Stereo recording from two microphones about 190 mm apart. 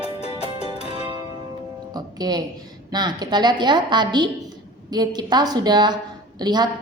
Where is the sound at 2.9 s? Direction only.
20° right (ahead or behind).